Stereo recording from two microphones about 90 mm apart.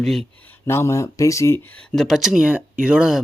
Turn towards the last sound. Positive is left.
turn(degrees=-5)  # may be behind; listen again after turning